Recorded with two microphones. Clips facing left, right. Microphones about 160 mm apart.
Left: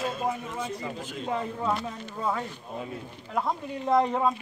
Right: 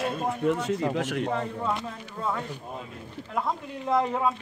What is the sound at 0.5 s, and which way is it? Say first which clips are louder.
Speech: right 8 dB; 75° right (ahead or behind).